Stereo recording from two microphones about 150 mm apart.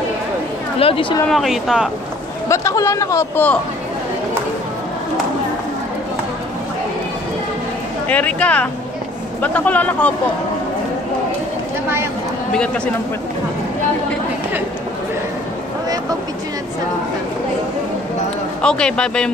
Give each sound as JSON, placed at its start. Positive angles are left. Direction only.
{"t": 0.7, "sound": "speech", "side_deg": 40}
{"t": 1.3, "sound": "speech", "side_deg": 0}
{"t": 2.4, "sound": "speech", "side_deg": 20}
{"t": 8.1, "sound": "speech", "side_deg": 10}
{"t": 12.5, "sound": "speech", "side_deg": 5}
{"t": 18.6, "sound": "speech", "side_deg": 5}